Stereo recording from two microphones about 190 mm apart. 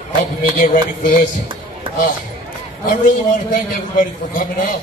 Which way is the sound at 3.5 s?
45° left (ahead or behind).